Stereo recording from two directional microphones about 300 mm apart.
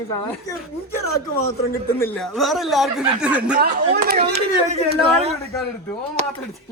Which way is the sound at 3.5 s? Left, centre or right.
Right.